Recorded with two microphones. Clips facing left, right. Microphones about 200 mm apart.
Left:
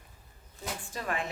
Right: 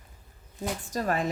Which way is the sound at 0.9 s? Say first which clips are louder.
Right 7 dB; 40° right (ahead or behind).